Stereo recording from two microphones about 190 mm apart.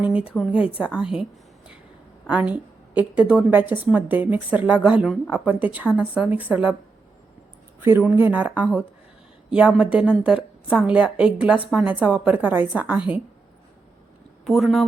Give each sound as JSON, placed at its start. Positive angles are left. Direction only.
{"t": 0.0, "sound": "a woman's voice", "side_deg": -5}
{"t": 7.8, "sound": "a woman's voice", "side_deg": -10}
{"t": 14.4, "sound": "a woman's voice", "side_deg": 0}